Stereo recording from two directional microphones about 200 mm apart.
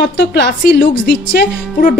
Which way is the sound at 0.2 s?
60° left (ahead or behind).